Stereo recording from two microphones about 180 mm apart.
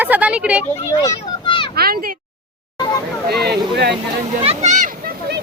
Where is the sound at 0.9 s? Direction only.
25° left (ahead or behind).